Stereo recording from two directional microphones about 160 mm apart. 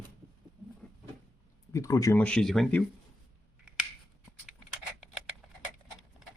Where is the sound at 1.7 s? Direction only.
20° left (ahead or behind).